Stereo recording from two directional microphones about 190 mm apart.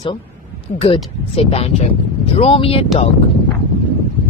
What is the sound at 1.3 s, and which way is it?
Speech, 30° left (ahead or behind).